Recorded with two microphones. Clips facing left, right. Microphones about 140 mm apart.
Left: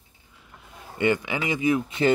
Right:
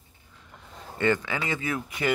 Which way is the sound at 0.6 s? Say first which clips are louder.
Left 2 dB; 10° left (ahead or behind).